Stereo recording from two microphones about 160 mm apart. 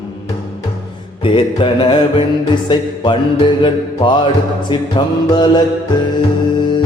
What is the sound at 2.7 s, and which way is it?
Music, 30° left (ahead or behind).